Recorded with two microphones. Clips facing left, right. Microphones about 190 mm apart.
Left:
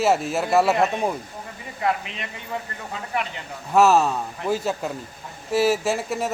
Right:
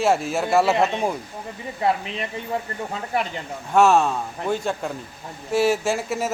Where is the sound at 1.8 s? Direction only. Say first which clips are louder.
Right 2 dB; 30° right (ahead or behind).